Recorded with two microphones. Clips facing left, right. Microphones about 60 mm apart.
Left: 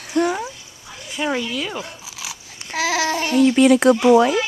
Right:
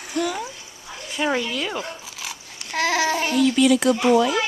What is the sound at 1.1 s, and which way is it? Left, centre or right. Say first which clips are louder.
A child's voice: even; centre.